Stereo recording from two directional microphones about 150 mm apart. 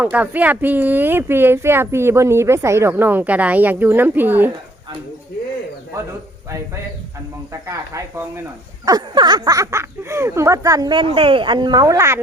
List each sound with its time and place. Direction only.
0.0 s speech: 10° right (ahead or behind)
7.7 s speech: 20° right (ahead or behind)